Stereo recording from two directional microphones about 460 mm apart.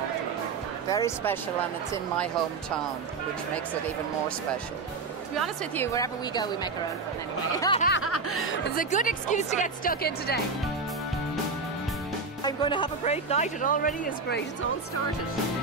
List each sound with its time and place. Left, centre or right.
0.8 s speech: centre
5.4 s speech: centre
7.9 s speech: left
12.4 s speech: centre